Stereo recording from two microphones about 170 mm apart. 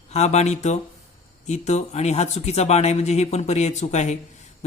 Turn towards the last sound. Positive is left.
turn(degrees=45)  # may be behind; listen again after turning